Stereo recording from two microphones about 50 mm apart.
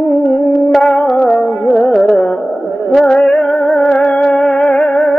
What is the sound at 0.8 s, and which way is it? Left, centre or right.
Music, left.